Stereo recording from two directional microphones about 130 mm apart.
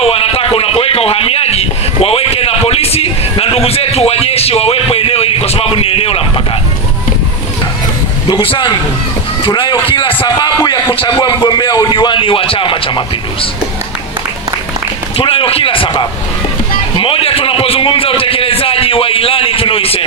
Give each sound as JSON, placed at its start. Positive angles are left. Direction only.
{"t": 0.0, "sound": "speech", "side_deg": 50}
{"t": 8.3, "sound": "a man's voice", "side_deg": 40}
{"t": 15.1, "sound": "a man's voice", "side_deg": 45}
{"t": 16.9, "sound": "a sound", "side_deg": 45}